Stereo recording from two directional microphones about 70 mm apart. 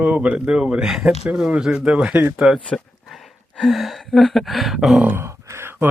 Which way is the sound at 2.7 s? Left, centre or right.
Centre.